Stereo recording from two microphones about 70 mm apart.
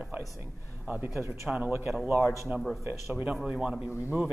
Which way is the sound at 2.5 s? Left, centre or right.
Right.